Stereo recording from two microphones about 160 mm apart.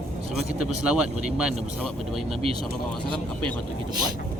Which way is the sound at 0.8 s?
5° right (ahead or behind).